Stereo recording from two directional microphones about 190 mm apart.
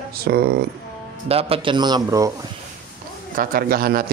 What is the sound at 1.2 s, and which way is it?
A man's voice, 30° right (ahead or behind).